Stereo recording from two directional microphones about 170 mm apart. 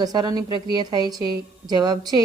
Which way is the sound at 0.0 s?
25° right (ahead or behind).